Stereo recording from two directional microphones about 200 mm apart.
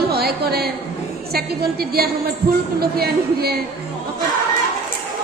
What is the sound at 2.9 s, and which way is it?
Speech, 50° right (ahead or behind).